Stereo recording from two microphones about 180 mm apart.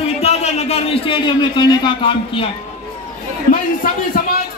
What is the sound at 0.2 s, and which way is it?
A man's voice, 35° left (ahead or behind).